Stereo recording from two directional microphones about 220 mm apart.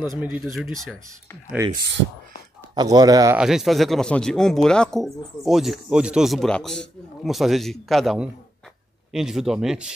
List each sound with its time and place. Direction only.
0.2 s a man's voice: 5° right (ahead or behind)
2.7 s speech: 20° right (ahead or behind)
3.3 s a man's voice: centre (ahead or behind)